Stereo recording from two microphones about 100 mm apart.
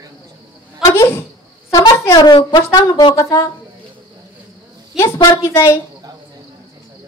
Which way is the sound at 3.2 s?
30° left (ahead or behind).